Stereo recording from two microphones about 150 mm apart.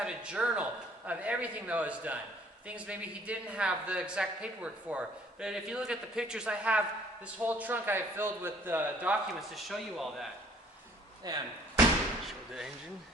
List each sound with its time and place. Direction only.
0.0 s a man's voice: 5° right (ahead or behind)
9.4 s speech: centre (ahead or behind)
11.3 s speech: 25° right (ahead or behind)
12.2 s speech: 5° right (ahead or behind)